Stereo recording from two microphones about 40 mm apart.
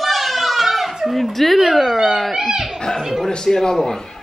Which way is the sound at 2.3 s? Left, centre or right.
Centre.